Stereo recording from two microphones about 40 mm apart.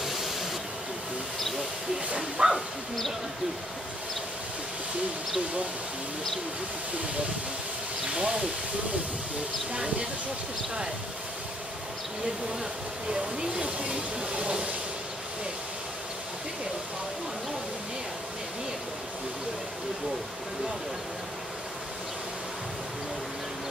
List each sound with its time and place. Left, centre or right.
0.0 s a sound: centre
2.1 s bow-wow: centre
8.1 s speech: right
13.1 s speech: right